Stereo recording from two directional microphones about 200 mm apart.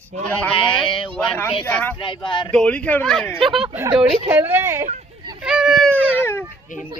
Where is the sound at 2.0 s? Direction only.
25° left (ahead or behind).